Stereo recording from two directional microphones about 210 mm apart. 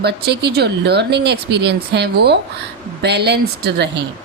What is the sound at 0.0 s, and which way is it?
A woman's voice, 50° right (ahead or behind).